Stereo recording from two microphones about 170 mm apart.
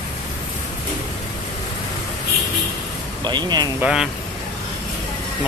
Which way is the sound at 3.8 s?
5° right (ahead or behind).